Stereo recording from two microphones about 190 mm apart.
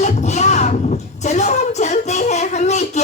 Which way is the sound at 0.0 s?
35° left (ahead or behind).